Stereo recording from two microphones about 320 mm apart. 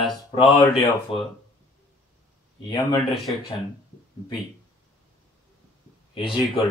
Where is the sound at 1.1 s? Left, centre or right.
Centre.